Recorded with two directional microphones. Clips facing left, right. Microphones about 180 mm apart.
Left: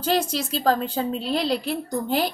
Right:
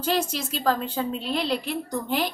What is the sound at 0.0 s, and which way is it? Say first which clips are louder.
A woman's voice: left 2 dB; 35° left (ahead or behind).